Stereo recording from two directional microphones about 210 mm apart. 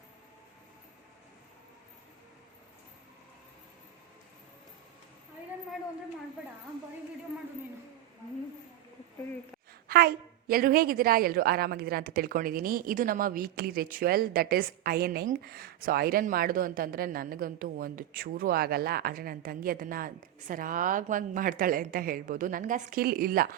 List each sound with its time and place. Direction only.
9.9 s a woman's voice: 45° right (ahead or behind)